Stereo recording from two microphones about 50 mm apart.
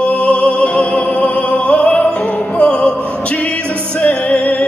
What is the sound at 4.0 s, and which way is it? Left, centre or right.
Music, left.